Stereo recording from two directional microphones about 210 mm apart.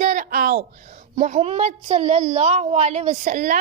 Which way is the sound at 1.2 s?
30° right (ahead or behind).